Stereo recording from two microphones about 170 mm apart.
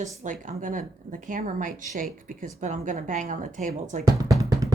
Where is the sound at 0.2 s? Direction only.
50° right (ahead or behind).